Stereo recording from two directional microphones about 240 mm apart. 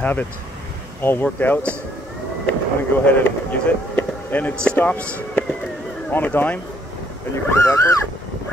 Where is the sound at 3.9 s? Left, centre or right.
Centre.